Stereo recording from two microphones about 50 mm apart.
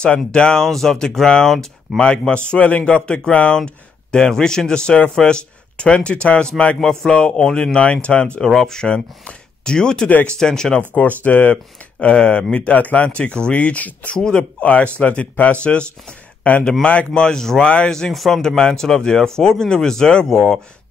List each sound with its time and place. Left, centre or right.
0.0 s speech: centre
6.8 s speech: centre
7.2 s speech: left
8.5 s speech: centre
8.8 s speech: left
10.9 s speech: left
12.0 s speech: left
15.6 s speech: left
17.6 s speech: left
17.9 s speech: centre